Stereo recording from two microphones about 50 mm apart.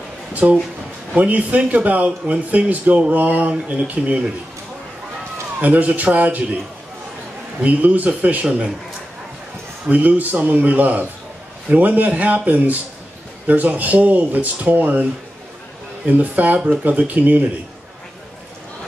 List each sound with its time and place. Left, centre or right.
0.3 s speech: right
5.6 s speech: right
7.6 s speech: right
9.8 s speech: right
16.1 s speech: right